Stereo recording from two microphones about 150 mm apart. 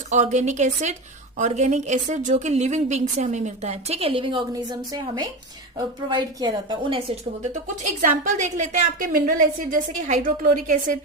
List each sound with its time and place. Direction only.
0.1 s a woman's voice: 50° right (ahead or behind); by 7.0 s 30° right (ahead or behind)
7.9 s a woman's voice: 55° right (ahead or behind)